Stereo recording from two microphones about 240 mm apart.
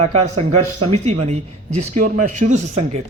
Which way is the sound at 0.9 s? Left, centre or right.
Right.